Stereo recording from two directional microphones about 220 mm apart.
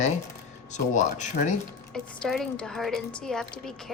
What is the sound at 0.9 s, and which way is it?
Speech, 35° left (ahead or behind).